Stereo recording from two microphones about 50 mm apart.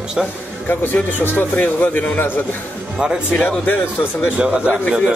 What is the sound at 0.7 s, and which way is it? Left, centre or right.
A man's voice, left.